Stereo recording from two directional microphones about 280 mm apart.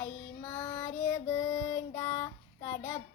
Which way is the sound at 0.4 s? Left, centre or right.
Left.